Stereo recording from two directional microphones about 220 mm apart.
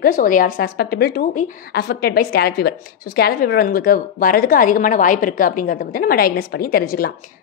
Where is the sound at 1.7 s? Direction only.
45° left (ahead or behind).